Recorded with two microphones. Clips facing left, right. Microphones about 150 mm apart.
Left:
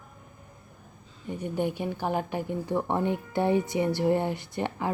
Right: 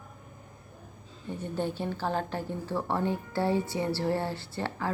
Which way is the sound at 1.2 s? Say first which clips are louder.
Left 3 dB; 15° left (ahead or behind).